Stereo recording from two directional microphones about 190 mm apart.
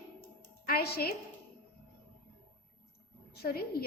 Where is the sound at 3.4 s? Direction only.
55° left (ahead or behind).